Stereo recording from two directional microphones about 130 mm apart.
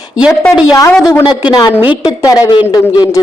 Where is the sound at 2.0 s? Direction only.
25° left (ahead or behind).